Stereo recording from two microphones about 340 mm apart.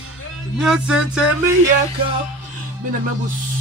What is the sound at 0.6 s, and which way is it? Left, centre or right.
Speech, centre.